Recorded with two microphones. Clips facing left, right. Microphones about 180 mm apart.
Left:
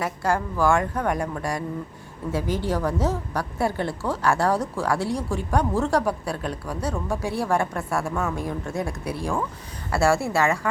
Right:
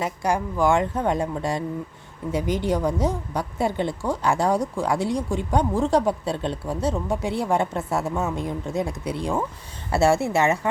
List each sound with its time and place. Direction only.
0.0 s a woman's voice: 15° right (ahead or behind)